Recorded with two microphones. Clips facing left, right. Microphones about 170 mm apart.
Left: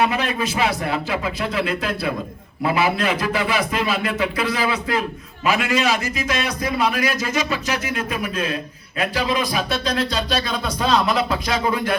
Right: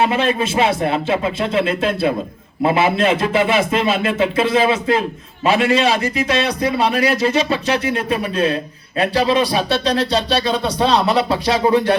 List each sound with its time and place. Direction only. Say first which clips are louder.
0.0 s a man's voice: right 4 dB; 25° right (ahead or behind)